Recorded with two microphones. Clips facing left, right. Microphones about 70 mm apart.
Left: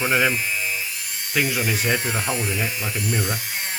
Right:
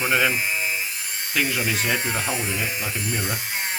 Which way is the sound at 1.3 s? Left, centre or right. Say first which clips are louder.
Left 1 dB; centre.